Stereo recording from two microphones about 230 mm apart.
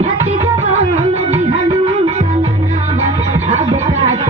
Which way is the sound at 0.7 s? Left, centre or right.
Right.